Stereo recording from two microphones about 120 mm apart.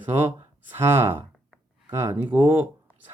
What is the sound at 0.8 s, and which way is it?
Speech, 20° right (ahead or behind).